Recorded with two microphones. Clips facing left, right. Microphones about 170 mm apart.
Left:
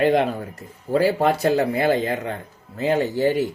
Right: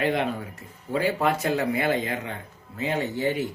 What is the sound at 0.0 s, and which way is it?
Speech, 35° left (ahead or behind).